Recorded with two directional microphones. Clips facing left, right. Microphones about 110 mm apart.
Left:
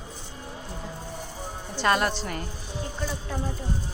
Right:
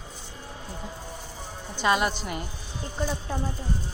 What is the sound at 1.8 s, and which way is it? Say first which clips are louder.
Speech: even; 5° right (ahead or behind).